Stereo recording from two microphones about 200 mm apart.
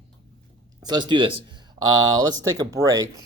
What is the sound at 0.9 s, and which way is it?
Speech, 20° right (ahead or behind).